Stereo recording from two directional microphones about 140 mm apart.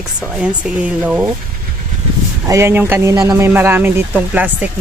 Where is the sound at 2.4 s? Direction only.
20° right (ahead or behind).